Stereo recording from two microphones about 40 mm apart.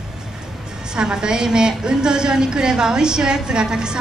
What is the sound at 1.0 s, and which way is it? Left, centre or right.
A woman's voice, centre.